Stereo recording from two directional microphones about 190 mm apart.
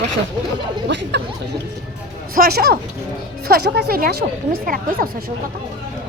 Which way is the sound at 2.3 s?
50° right (ahead or behind).